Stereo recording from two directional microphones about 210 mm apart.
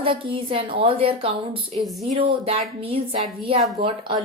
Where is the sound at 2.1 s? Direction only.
25° right (ahead or behind).